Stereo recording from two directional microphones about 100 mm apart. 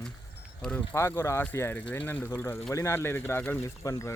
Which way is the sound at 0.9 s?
25° left (ahead or behind).